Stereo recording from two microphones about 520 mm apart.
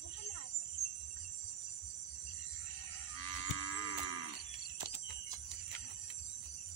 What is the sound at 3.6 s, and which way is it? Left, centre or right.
Cattle, left.